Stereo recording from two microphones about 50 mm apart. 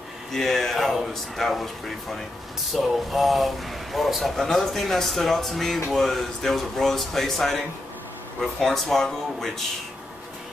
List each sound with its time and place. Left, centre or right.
0.3 s speech: centre
2.7 s speech: centre